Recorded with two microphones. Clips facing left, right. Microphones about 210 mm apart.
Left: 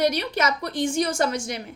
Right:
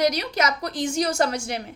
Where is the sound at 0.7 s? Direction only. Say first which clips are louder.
Even; 55° left (ahead or behind).